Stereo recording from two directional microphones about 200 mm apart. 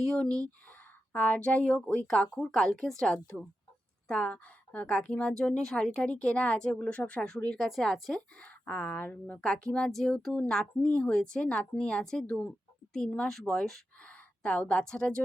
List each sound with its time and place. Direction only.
0.3 s speech: 15° right (ahead or behind)
1.1 s a woman's voice: 5° left (ahead or behind)
4.1 s a woman's voice: 5° left (ahead or behind)